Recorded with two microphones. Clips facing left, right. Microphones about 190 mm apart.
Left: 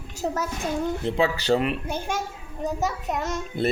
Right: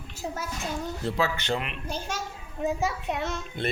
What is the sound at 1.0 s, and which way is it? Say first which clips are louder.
Speech: left 4 dB; 25° left (ahead or behind).